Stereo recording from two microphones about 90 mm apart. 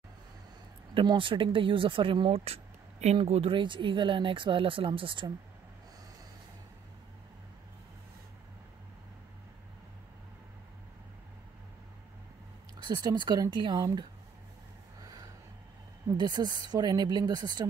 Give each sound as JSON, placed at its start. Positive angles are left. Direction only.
{"t": 1.0, "sound": "speech", "side_deg": -70}
{"t": 3.2, "sound": "speech", "side_deg": -80}
{"t": 12.7, "sound": "speech", "side_deg": -50}
{"t": 15.0, "sound": "a sound", "side_deg": -40}
{"t": 16.1, "sound": "speech", "side_deg": -50}